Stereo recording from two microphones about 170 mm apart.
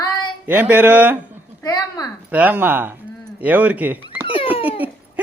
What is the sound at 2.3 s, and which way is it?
Speech, 10° right (ahead or behind).